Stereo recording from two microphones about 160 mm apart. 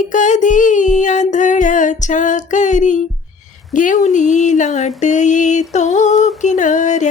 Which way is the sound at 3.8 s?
50° left (ahead or behind).